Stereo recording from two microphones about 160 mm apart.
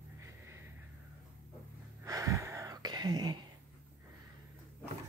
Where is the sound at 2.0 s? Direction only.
20° right (ahead or behind).